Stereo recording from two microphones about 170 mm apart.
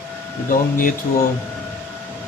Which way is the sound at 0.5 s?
55° left (ahead or behind).